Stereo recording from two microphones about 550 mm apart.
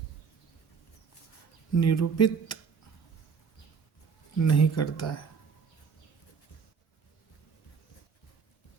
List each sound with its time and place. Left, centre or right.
1.7 s speech: left
4.4 s speech: left